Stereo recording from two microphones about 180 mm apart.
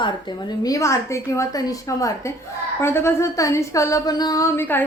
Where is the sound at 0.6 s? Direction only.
15° left (ahead or behind).